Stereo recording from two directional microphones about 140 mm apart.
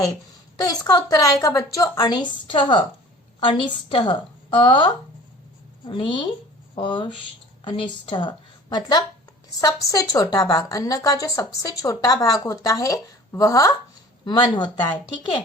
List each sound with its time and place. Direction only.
0.6 s a woman's voice: 25° left (ahead or behind)